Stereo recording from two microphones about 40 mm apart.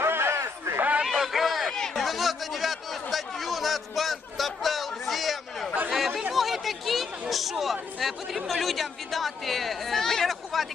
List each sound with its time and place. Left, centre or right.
0.0 s crowd: right
1.0 s a sound: centre
1.9 s chatter: centre
6.3 s speech: centre